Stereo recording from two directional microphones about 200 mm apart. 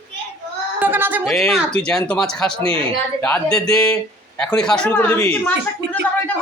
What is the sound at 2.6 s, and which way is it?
Speech, 30° right (ahead or behind).